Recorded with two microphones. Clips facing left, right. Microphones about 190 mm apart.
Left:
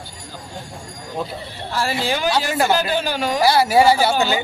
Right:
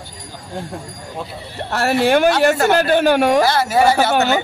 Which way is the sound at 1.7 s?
65° right (ahead or behind).